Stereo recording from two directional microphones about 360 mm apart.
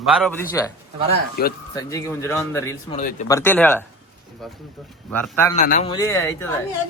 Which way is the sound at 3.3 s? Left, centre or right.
Centre.